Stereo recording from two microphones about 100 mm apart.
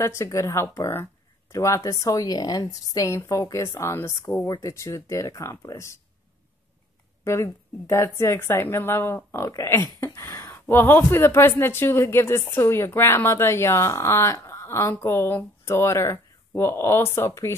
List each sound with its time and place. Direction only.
0.0 s a woman's voice: 30° left (ahead or behind)
7.2 s a woman's voice: 25° left (ahead or behind)
10.5 s speech: 20° left (ahead or behind)